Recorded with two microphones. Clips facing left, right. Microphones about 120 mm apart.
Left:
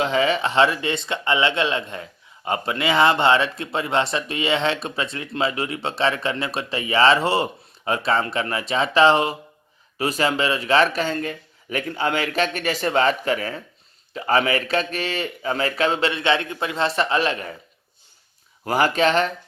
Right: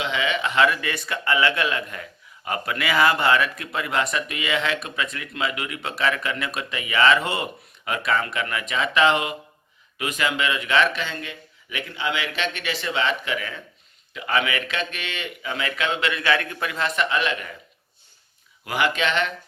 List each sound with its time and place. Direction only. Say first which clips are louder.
0.0 s speech: left 5 dB; 40° left (ahead or behind)
18.6 s speech: left 5 dB; 40° left (ahead or behind)